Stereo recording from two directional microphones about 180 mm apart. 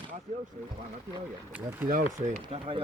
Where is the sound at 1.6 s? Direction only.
10° right (ahead or behind).